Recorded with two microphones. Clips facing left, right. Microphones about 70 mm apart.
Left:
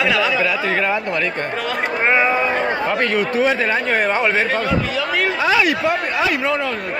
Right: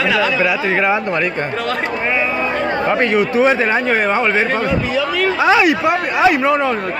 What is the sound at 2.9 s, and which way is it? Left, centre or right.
Speech, centre.